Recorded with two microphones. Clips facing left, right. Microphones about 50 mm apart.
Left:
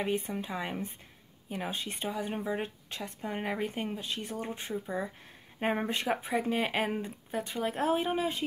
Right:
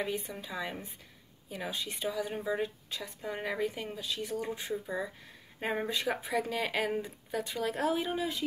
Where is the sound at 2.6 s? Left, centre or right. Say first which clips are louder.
Right 1 dB; left.